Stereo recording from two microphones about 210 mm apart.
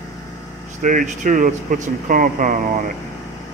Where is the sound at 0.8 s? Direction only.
40° right (ahead or behind).